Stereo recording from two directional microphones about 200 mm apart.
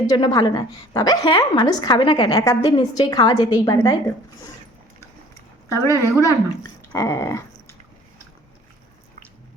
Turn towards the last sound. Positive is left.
turn(degrees=15)  # may be behind; listen again after turning